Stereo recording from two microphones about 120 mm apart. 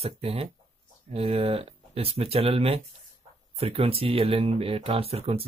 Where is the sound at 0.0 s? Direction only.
55° right (ahead or behind).